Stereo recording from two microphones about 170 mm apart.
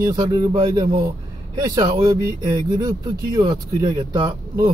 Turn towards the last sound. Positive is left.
turn(degrees=-25)  # may be behind; listen again after turning